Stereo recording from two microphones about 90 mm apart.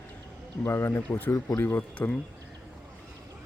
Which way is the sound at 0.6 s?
30° left (ahead or behind).